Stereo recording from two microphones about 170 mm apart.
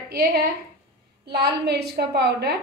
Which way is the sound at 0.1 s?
65° right (ahead or behind).